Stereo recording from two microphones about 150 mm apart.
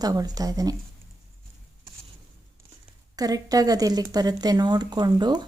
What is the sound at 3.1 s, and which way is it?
Speech, 25° right (ahead or behind).